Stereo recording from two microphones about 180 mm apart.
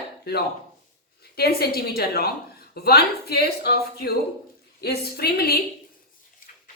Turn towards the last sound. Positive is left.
turn(degrees=60)  # may be behind; listen again after turning